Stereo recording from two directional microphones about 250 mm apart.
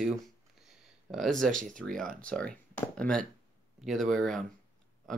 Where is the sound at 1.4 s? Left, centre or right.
Right.